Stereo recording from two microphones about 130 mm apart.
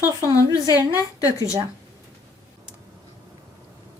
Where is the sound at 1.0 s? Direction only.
25° left (ahead or behind).